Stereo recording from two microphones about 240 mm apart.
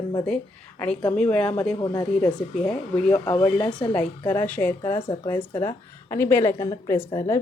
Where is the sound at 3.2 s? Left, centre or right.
Left.